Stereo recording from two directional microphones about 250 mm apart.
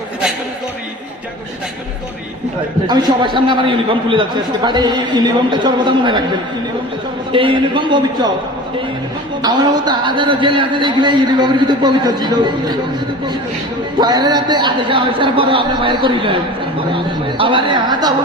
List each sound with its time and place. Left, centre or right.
2.8 s a man's voice: centre
7.3 s a woman's voice: right
9.4 s a man's voice: centre
14.0 s a man's voice: centre